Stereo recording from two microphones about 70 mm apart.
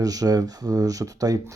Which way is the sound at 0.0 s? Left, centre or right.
Right.